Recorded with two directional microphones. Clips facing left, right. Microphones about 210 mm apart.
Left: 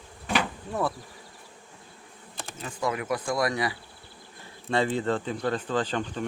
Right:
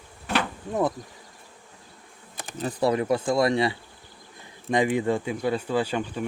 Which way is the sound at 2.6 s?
35° right (ahead or behind).